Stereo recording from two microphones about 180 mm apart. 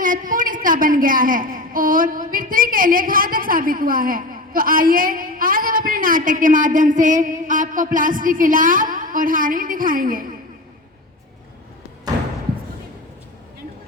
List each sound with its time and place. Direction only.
0.0 s a woman's voice: 50° right (ahead or behind)